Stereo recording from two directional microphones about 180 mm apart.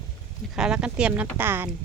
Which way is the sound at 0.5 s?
5° right (ahead or behind).